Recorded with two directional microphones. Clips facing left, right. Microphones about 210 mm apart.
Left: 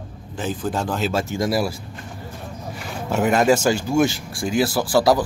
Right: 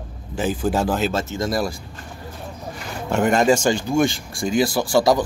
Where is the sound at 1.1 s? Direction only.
15° left (ahead or behind).